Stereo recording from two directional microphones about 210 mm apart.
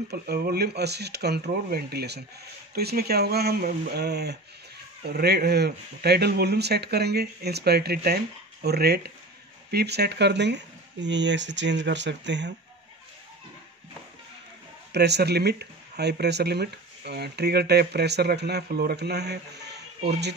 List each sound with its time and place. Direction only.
0.1 s speech: 50° right (ahead or behind)
14.9 s speech: 50° right (ahead or behind)